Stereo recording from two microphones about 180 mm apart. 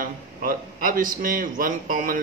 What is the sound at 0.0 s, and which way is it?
A man's voice, 50° right (ahead or behind).